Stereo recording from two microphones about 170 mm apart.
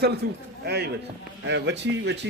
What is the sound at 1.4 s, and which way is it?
Speech, 90° right.